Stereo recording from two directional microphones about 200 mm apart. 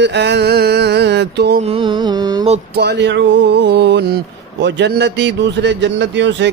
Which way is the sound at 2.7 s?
60° right (ahead or behind).